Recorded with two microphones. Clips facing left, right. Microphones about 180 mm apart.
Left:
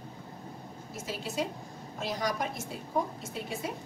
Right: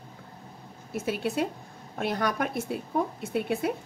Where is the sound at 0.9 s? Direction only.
60° right (ahead or behind).